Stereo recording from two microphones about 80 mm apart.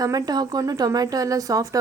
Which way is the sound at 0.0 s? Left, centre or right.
Right.